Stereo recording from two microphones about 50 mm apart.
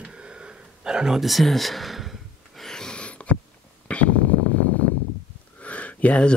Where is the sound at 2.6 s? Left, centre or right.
Centre.